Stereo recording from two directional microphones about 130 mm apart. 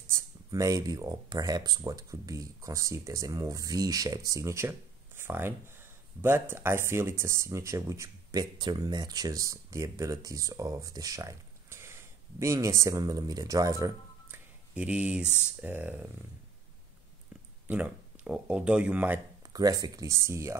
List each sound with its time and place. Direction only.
0.1 s speech: 25° right (ahead or behind)
14.7 s speech: 10° right (ahead or behind)
17.6 s speech: 10° right (ahead or behind)
19.4 s speech: 30° right (ahead or behind)